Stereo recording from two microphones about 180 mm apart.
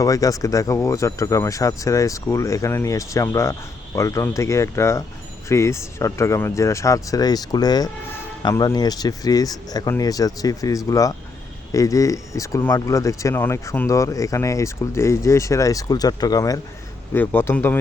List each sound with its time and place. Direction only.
0.0 s speech: 20° left (ahead or behind)